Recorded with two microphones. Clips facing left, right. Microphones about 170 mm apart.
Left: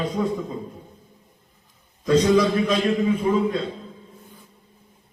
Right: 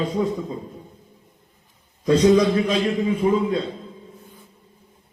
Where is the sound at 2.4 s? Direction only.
25° right (ahead or behind).